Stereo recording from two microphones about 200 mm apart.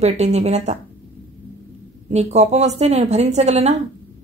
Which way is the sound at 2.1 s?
35° right (ahead or behind).